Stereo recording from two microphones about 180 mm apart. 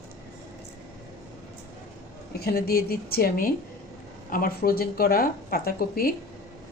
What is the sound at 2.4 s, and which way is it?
A woman's voice, 60° left (ahead or behind).